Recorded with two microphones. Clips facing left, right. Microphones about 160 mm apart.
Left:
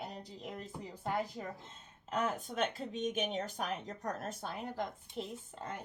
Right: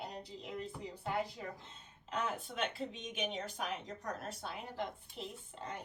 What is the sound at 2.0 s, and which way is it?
Speech, 45° left (ahead or behind).